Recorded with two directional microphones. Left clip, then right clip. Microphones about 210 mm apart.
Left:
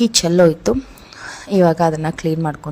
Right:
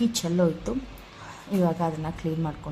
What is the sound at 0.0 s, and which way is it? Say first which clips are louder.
A woman's voice: left 12 dB; 40° left (ahead or behind).